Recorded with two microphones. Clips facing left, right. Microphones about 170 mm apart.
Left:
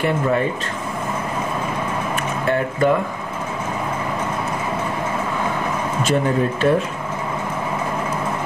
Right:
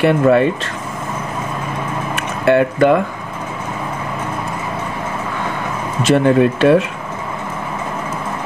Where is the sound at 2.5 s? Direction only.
80° right.